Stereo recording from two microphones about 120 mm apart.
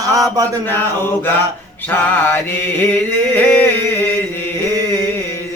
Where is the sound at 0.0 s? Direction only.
30° right (ahead or behind).